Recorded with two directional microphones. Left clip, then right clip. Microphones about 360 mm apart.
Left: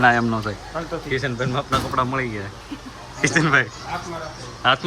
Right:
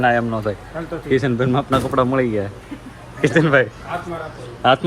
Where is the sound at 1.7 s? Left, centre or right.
Centre.